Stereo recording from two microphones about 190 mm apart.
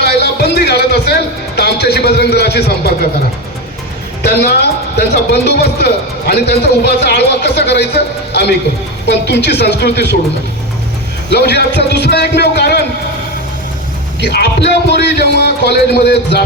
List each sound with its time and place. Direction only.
0.0 s music: 60° left (ahead or behind)
4.4 s a man's voice: 60° left (ahead or behind)
11.3 s a man's voice: 60° left (ahead or behind)
14.2 s a man's voice: 60° left (ahead or behind)